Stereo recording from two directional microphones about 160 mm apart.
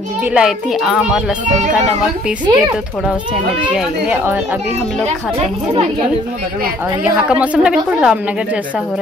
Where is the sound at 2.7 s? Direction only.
5° right (ahead or behind).